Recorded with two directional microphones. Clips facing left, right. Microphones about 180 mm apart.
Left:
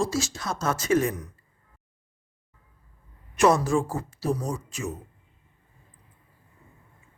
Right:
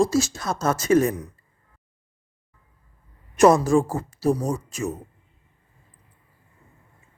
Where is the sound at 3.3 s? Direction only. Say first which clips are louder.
Right 5 dB; 45° right (ahead or behind).